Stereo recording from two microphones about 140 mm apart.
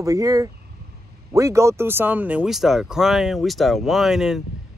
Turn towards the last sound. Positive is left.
turn(degrees=0)  # may be behind; listen again after turning